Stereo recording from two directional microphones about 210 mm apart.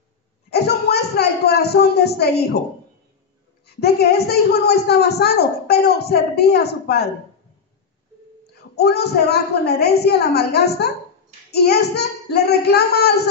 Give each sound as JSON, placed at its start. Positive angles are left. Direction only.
{"t": 0.5, "sound": "speech", "side_deg": 50}
{"t": 3.6, "sound": "a man's voice", "side_deg": 50}
{"t": 8.7, "sound": "a man's voice", "side_deg": 50}